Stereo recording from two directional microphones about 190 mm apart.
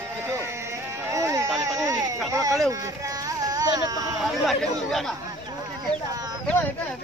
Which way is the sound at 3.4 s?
20° right (ahead or behind).